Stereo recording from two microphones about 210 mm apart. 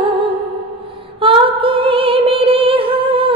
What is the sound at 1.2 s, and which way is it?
Female singing, 25° right (ahead or behind).